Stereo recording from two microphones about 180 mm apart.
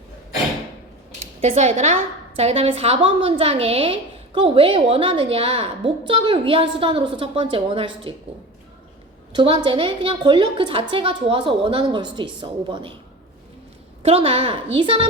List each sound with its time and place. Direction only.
1.4 s a woman's voice: 40° right (ahead or behind)
9.3 s a woman's voice: 25° right (ahead or behind)
14.0 s a woman's voice: 30° right (ahead or behind)